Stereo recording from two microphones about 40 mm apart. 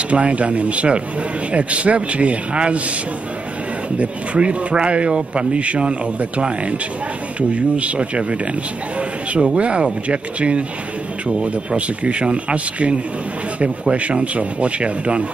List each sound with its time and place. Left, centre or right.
0.1 s speech: right
4.0 s a man's voice: right
9.4 s a man's voice: right